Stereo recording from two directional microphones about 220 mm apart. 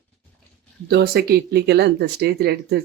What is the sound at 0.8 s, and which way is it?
Speech, 45° right (ahead or behind).